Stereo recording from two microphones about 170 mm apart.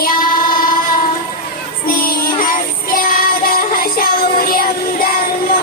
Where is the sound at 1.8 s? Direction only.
60° left (ahead or behind).